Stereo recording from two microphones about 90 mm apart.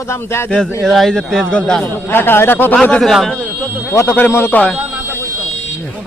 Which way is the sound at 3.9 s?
25° left (ahead or behind).